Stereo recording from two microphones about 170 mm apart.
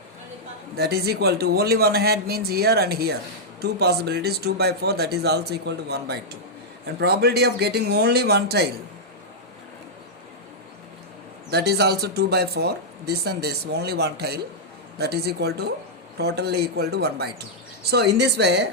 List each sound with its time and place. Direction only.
0.8 s speech: 70° right (ahead or behind)
11.5 s speech: 75° right (ahead or behind)